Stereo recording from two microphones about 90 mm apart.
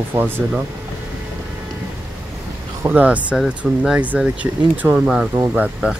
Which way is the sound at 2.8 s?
20° right (ahead or behind).